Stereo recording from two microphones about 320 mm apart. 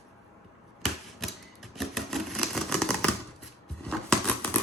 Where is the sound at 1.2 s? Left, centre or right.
Centre.